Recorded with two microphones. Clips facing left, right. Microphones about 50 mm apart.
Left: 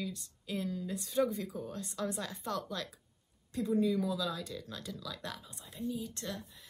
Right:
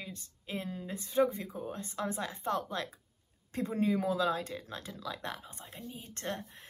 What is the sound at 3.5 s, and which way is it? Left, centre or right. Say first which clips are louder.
A woman's voice: even; right.